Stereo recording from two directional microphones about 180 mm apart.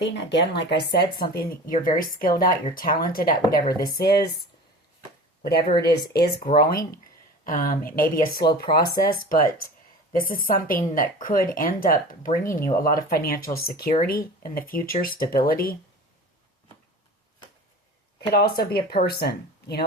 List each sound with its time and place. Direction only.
0.0 s speech: 75° left (ahead or behind); by 4.2 s 60° left (ahead or behind)
5.4 s a woman's voice: 55° left (ahead or behind)
18.4 s speech: 55° left (ahead or behind)